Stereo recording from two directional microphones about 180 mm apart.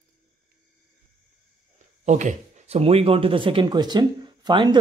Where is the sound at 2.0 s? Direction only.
40° right (ahead or behind).